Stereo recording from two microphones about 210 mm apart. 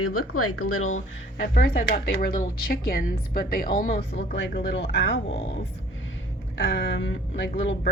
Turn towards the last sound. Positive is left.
turn(degrees=55)  # may be behind; listen again after turning